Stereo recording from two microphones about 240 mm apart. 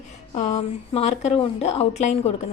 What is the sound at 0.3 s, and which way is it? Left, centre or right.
A woman's voice, left.